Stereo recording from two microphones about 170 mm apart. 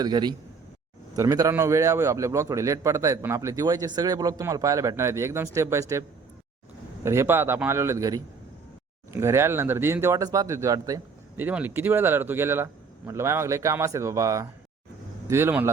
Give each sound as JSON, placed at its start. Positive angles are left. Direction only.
{"t": 0.0, "sound": "a man's voice", "side_deg": -25}
{"t": 7.0, "sound": "speech", "side_deg": -15}